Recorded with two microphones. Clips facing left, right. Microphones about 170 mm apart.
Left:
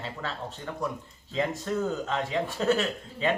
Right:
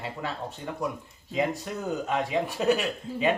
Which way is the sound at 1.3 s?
15° right (ahead or behind).